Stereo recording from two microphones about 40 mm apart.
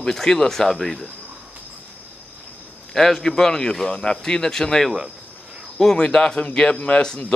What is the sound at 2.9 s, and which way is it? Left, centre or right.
Speech, centre.